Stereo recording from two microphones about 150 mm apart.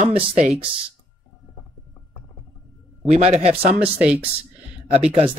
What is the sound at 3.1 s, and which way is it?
Speech, 40° right (ahead or behind).